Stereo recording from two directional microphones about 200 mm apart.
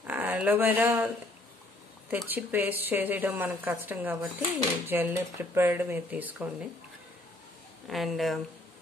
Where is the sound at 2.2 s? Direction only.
10° right (ahead or behind).